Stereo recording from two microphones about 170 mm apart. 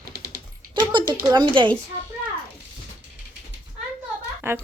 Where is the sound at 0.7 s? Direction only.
25° right (ahead or behind).